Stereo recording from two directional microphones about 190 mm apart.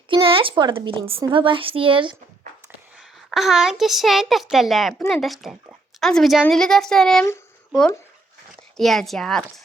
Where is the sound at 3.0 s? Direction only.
Centre (ahead or behind).